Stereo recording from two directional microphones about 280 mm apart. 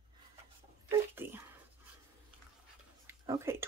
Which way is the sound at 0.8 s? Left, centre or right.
Centre.